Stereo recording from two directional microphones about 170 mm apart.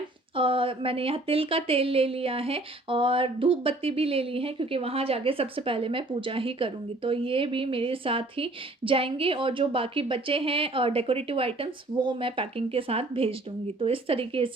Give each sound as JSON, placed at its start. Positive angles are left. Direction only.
{"t": 0.3, "sound": "speech", "side_deg": -30}